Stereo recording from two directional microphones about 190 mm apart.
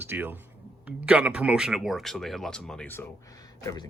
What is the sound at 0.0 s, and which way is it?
Speech, 10° right (ahead or behind).